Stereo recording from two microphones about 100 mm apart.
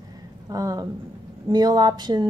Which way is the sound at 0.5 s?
40° right (ahead or behind).